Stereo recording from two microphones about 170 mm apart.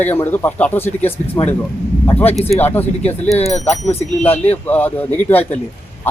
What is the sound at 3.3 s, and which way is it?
Speech, 40° left (ahead or behind).